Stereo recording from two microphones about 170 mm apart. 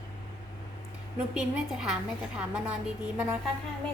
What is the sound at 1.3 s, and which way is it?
A woman's voice, 5° right (ahead or behind).